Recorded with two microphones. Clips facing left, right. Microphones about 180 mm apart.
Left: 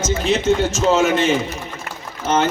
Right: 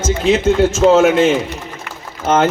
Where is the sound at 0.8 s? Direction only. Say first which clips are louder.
Right 7 dB; 60° right (ahead or behind).